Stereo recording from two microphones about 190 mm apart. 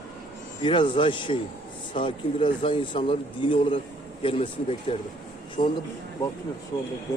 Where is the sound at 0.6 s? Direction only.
25° left (ahead or behind).